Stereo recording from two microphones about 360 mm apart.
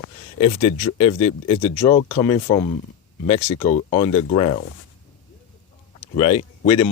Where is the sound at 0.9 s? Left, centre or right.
Centre.